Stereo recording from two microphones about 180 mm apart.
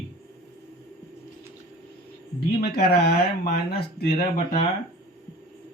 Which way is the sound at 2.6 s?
60° left (ahead or behind).